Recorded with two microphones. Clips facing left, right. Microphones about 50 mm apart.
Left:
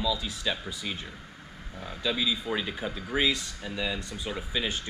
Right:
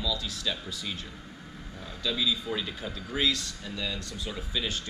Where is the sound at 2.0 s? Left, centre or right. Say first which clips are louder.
Left 1 dB; centre.